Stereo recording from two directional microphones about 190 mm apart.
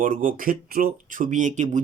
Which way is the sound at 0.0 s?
45° right (ahead or behind).